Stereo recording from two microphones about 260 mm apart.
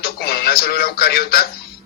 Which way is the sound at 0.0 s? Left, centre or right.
Left.